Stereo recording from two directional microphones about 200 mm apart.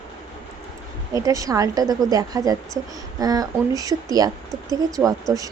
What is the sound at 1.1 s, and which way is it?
Speech, 15° right (ahead or behind).